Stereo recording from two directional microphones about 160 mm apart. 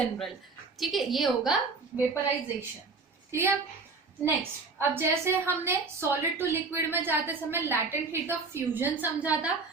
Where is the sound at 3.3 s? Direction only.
15° right (ahead or behind).